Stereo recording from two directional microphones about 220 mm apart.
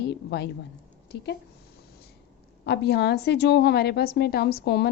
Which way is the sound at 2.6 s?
50° left (ahead or behind).